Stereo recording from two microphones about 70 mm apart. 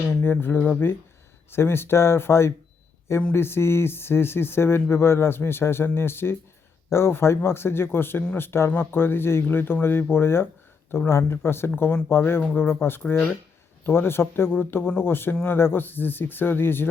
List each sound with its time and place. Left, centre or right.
0.1 s speech: left